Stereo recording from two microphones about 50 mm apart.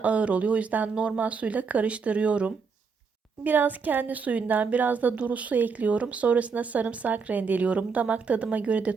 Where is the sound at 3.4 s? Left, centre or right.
Right.